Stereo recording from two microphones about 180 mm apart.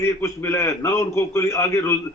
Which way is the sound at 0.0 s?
15° left (ahead or behind).